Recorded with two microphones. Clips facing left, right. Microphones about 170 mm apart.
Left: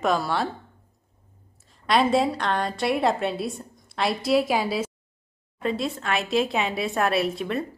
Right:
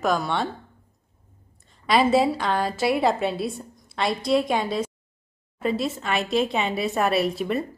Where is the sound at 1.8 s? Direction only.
Centre (ahead or behind).